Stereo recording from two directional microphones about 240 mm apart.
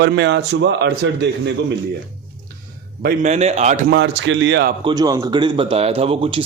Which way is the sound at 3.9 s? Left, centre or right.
Right.